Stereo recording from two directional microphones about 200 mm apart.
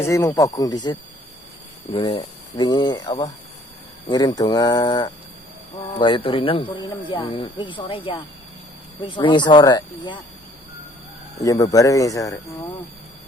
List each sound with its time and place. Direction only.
0.0 s speech: 15° left (ahead or behind)
11.4 s speech: 15° left (ahead or behind)